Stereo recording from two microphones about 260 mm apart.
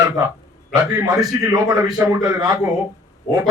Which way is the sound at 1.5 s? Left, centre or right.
Centre.